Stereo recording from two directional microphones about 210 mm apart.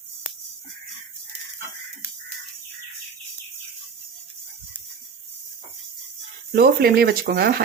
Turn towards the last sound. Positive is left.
turn(degrees=-45)  # may be behind; listen again after turning